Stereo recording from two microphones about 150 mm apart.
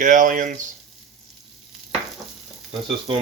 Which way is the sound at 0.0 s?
60° right (ahead or behind).